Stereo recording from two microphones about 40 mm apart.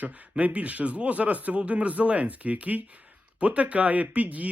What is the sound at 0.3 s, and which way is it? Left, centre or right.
Speech, right.